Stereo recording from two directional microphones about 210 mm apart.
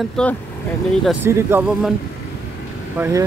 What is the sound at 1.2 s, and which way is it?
Speech, 10° right (ahead or behind).